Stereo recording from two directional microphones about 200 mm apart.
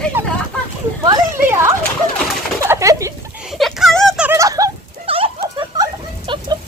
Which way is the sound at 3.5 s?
Centre (ahead or behind).